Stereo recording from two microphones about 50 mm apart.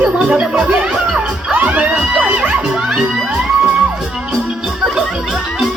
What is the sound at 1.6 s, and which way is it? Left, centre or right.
Music, right.